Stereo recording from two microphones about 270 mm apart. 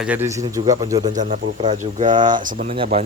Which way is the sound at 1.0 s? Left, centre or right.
Right.